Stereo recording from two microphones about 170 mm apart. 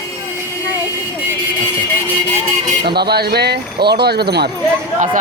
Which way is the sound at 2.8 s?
70° right (ahead or behind).